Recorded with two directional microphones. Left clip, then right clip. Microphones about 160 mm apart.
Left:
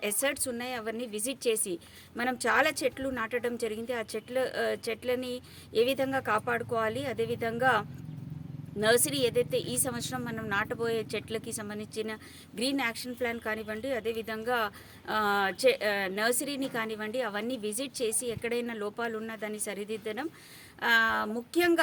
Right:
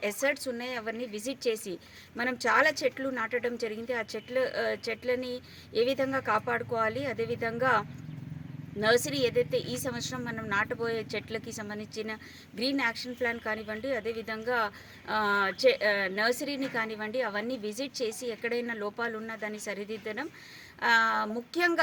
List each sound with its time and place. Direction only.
0.0 s a woman's voice: 40° left (ahead or behind)